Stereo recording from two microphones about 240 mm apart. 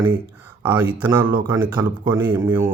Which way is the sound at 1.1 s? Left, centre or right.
Centre.